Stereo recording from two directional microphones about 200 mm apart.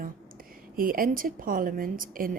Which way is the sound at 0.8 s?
45° right (ahead or behind).